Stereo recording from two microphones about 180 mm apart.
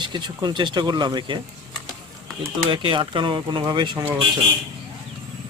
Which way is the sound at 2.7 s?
25° right (ahead or behind).